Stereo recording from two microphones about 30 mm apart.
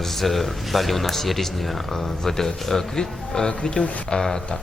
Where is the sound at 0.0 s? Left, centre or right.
Centre.